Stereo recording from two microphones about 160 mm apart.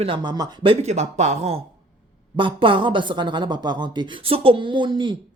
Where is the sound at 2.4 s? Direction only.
30° right (ahead or behind).